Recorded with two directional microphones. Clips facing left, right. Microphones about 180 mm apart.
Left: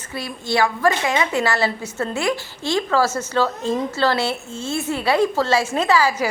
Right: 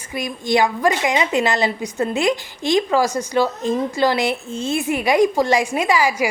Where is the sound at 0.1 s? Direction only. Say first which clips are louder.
Right 4 dB; 15° right (ahead or behind).